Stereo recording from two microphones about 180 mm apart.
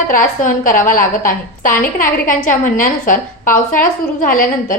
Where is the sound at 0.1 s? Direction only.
45° left (ahead or behind).